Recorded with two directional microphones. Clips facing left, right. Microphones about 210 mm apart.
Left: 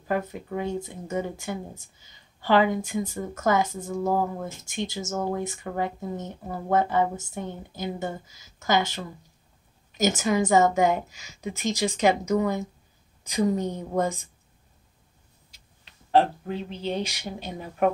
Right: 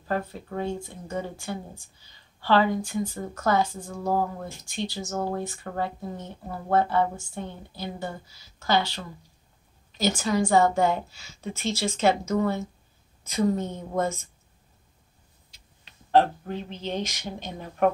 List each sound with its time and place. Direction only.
0.1 s a woman's voice: 15° left (ahead or behind)
10.0 s a woman's voice: 20° left (ahead or behind)
16.1 s a woman's voice: 5° left (ahead or behind)